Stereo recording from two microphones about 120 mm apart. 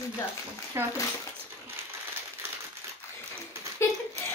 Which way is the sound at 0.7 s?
25° right (ahead or behind).